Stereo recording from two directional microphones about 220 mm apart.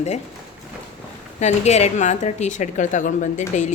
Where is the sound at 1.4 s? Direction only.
30° left (ahead or behind).